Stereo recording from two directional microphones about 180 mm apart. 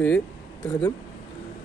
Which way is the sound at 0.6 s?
20° left (ahead or behind).